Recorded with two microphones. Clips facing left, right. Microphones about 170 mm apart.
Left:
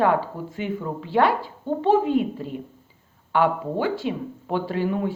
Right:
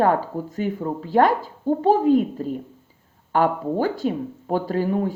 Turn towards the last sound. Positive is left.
turn(degrees=-40)  # may be behind; listen again after turning